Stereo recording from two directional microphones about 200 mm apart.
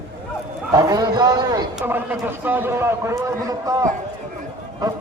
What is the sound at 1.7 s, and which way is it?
A man's voice, 10° right (ahead or behind).